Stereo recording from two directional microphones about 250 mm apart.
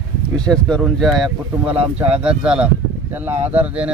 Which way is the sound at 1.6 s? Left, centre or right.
Right.